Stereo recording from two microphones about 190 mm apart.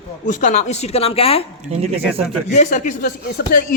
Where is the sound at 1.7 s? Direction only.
30° right (ahead or behind).